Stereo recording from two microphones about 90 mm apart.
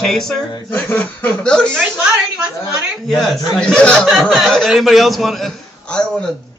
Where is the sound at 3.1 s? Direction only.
10° left (ahead or behind).